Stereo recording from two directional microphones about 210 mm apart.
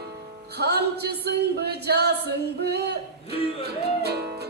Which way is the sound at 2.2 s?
50° right (ahead or behind).